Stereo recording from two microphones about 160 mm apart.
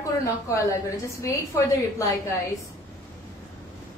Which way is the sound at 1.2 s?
20° left (ahead or behind).